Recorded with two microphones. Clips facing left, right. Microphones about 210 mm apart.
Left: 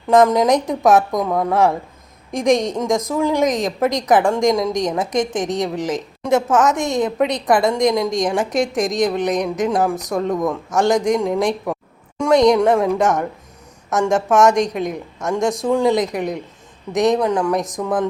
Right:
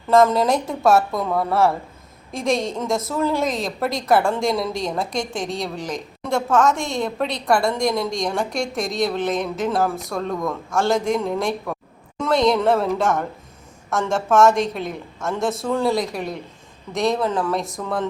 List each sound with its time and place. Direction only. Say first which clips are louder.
0.1 s a woman's voice: left 3 dB; 15° left (ahead or behind)